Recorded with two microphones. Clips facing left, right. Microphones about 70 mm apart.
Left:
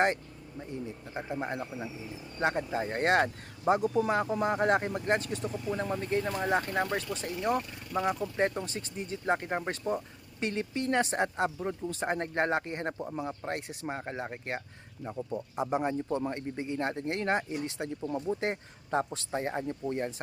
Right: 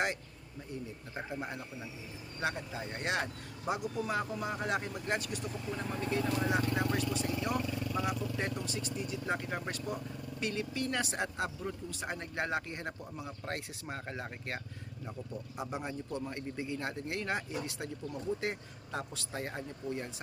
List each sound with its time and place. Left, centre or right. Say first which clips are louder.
1.1 s a man's voice: left 4 dB; left
1.5 s speech: left 7 dB; left
4.4 s speech: left 8 dB; left
13.4 s a man's voice: left 5 dB; left